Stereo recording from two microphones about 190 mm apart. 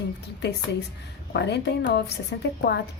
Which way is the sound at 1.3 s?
65° left (ahead or behind).